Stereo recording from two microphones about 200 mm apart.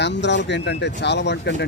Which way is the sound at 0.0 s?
60° left (ahead or behind).